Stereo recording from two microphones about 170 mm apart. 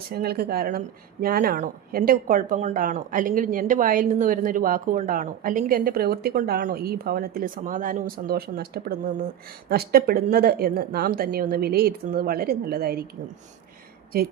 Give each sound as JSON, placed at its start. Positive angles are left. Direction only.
{"t": 0.1, "sound": "speech", "side_deg": -65}